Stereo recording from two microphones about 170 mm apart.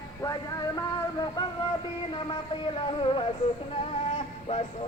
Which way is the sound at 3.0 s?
30° left (ahead or behind).